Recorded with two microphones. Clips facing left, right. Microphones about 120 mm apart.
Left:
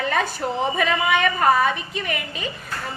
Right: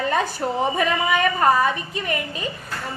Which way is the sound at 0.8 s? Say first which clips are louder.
Left 1 dB; 35° right (ahead or behind).